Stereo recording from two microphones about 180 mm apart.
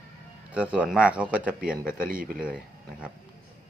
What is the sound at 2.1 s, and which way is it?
Speech, 50° right (ahead or behind).